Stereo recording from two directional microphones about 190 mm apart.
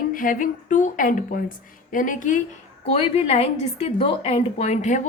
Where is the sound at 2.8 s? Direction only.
30° left (ahead or behind).